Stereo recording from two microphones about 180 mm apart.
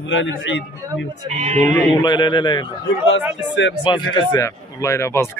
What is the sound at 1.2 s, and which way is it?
Speech, 40° right (ahead or behind).